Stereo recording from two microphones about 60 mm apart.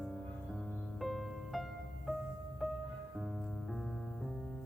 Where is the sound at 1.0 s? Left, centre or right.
Centre.